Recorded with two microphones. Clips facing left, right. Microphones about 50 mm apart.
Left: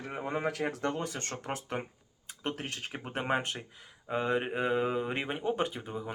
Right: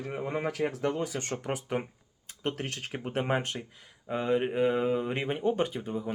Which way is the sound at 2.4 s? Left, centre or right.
Centre.